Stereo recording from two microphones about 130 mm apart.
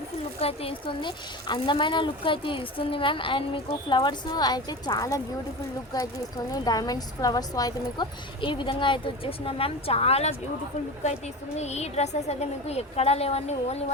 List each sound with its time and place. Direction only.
0.3 s a woman's voice: 50° left (ahead or behind)